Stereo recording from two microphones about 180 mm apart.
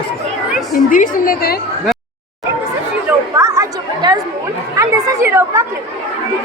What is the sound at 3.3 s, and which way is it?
Chatter, 15° right (ahead or behind).